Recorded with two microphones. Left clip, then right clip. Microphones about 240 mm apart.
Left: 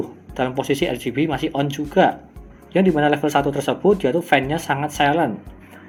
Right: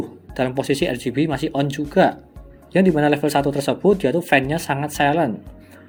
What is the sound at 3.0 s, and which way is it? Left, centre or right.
Speech, right.